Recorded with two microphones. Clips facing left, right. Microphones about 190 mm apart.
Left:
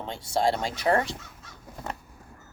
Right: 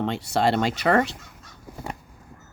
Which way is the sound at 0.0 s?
70° right (ahead or behind).